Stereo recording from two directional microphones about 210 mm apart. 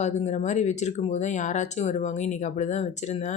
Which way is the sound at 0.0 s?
35° left (ahead or behind).